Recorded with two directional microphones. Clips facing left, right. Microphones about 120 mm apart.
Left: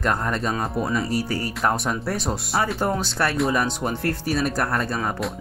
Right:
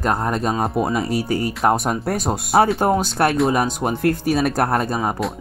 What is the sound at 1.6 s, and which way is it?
Speech, 35° right (ahead or behind).